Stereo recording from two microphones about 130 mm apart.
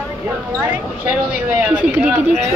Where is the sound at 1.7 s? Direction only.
10° right (ahead or behind).